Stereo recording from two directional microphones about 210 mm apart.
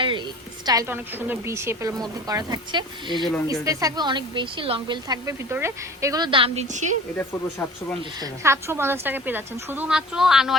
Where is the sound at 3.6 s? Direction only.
15° right (ahead or behind); by 6.9 s 35° right (ahead or behind).